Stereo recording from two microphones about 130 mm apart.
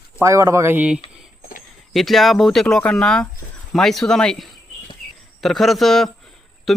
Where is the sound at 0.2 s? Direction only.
20° right (ahead or behind).